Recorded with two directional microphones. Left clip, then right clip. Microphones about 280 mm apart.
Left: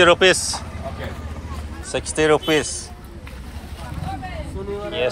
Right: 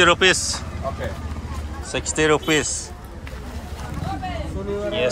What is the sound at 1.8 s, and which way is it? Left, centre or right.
Speech, centre.